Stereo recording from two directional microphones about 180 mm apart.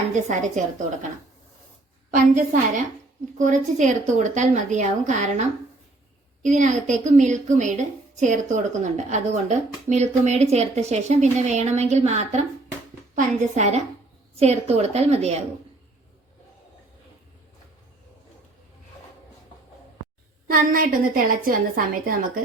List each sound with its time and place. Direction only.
0.1 s a woman's voice: 40° right (ahead or behind)
2.0 s a woman's voice: 45° right (ahead or behind)
6.4 s a woman's voice: 45° right (ahead or behind)
20.5 s a woman's voice: 50° right (ahead or behind)